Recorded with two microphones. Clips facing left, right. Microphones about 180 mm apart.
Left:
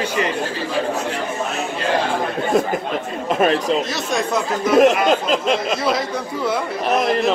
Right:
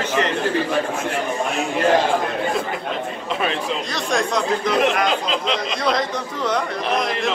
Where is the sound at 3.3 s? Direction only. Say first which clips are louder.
Left 7 dB; 45° left (ahead or behind).